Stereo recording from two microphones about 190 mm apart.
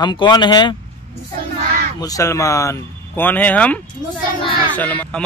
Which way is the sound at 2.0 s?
20° left (ahead or behind).